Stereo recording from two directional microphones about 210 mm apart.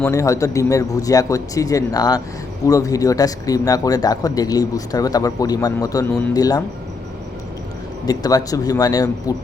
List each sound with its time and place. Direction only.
0.0 s speech: 15° left (ahead or behind)
8.0 s speech: 20° left (ahead or behind)